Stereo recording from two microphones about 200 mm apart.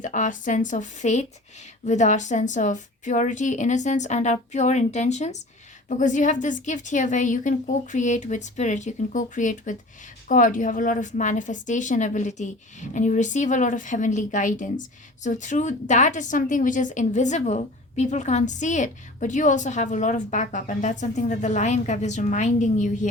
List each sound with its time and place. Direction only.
0.0 s a woman's voice: 40° left (ahead or behind)